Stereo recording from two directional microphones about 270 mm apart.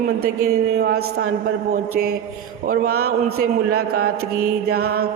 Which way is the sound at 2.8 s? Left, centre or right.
Right.